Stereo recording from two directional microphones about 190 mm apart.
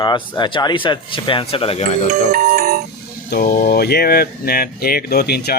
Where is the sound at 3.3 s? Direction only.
50° left (ahead or behind).